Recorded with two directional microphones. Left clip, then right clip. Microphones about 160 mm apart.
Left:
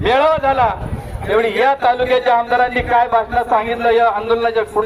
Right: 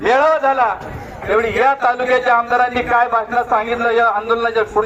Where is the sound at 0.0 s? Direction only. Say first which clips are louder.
Even; 5° left (ahead or behind).